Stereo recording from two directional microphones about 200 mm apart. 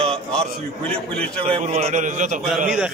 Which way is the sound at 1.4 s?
35° right (ahead or behind).